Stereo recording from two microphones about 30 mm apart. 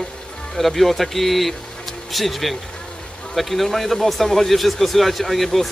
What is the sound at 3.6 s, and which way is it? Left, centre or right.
A man's voice, centre.